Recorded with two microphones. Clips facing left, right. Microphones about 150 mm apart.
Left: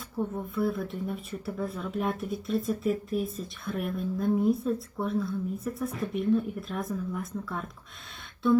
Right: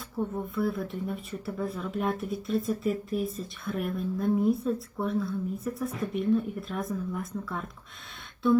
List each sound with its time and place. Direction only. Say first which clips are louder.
0.2 s speech: even; centre (ahead or behind)